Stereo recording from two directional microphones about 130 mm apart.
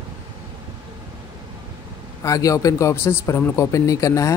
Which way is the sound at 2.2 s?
25° left (ahead or behind).